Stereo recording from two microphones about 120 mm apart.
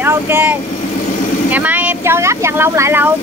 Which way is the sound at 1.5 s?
15° right (ahead or behind).